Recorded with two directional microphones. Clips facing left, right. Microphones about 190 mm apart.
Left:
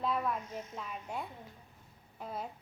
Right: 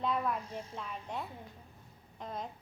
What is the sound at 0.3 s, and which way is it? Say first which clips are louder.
Speech: even; 30° right (ahead or behind).